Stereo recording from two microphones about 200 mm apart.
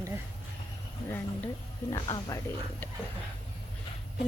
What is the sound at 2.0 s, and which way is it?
Speech, 20° left (ahead or behind).